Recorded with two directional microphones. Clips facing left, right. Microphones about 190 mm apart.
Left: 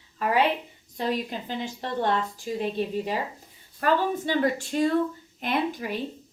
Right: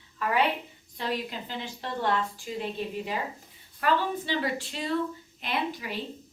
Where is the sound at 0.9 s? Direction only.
45° left (ahead or behind).